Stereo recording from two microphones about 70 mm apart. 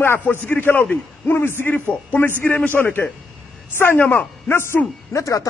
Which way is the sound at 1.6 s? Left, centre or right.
Left.